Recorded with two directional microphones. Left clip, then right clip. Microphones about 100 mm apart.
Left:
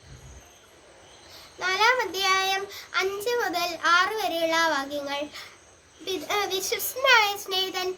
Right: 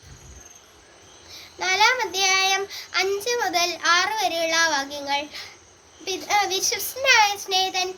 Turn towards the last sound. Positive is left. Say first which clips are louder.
# right 5 dB
turn(degrees=40)  # may be behind; listen again after turning